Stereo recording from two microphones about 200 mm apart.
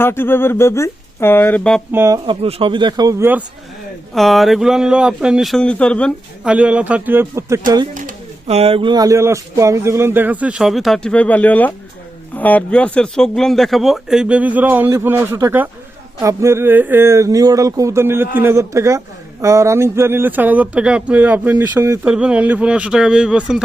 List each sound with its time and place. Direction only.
0.0 s speech: 10° left (ahead or behind)
1.9 s speech: 15° right (ahead or behind)
4.1 s speech: centre (ahead or behind)
6.5 s speech: 5° right (ahead or behind)
7.9 s speech: 35° right (ahead or behind); by 23.6 s 5° right (ahead or behind)